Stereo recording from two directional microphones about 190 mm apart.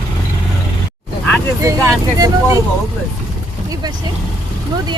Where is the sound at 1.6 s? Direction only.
15° right (ahead or behind).